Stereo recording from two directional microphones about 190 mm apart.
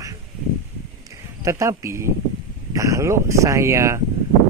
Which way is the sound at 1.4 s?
15° right (ahead or behind).